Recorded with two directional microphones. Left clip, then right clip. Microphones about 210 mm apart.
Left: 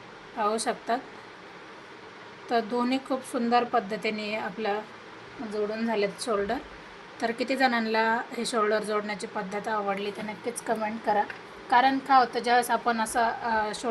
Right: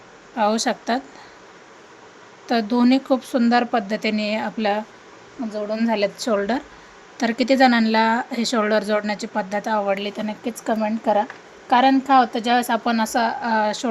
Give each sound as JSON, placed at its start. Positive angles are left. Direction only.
{"t": 0.3, "sound": "a woman's voice", "side_deg": -55}
{"t": 2.5, "sound": "a woman's voice", "side_deg": -55}